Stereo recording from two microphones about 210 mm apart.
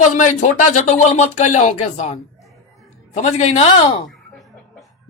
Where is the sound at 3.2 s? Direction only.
30° left (ahead or behind).